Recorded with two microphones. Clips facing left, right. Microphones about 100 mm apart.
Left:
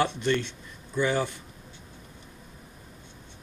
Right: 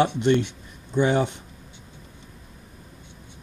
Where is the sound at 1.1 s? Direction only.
65° right (ahead or behind).